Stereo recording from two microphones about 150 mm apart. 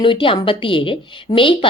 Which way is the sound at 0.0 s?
35° left (ahead or behind).